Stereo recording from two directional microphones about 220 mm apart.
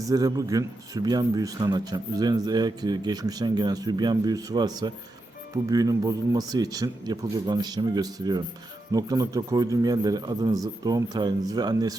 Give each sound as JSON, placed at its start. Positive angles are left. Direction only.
{"t": 0.0, "sound": "speech", "side_deg": -15}